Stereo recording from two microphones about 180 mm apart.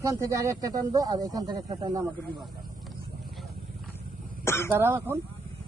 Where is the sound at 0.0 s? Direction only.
20° right (ahead or behind).